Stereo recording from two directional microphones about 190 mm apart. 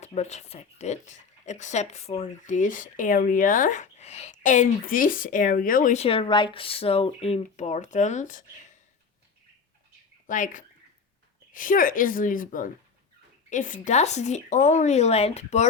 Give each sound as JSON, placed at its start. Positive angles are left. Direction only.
{"t": 0.0, "sound": "speech", "side_deg": 35}
{"t": 10.2, "sound": "a woman's voice", "side_deg": 45}